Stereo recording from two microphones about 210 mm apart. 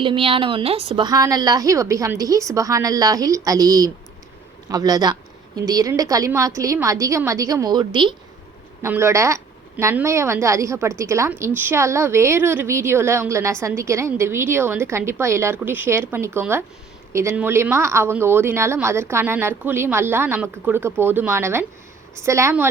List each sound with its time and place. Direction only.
0.0 s a woman's voice: 25° right (ahead or behind)